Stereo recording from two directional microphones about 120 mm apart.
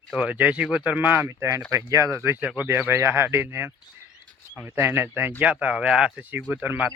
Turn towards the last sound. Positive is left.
turn(degrees=-15)  # may be behind; listen again after turning